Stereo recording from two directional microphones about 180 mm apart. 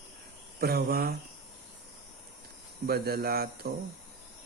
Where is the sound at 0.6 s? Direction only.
60° right (ahead or behind).